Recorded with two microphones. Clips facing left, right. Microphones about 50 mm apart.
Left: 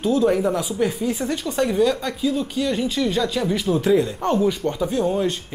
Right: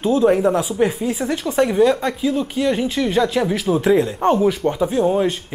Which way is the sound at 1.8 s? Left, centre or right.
Right.